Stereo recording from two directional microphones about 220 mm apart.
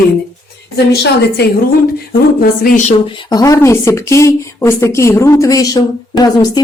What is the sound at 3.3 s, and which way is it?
Speech, 15° left (ahead or behind).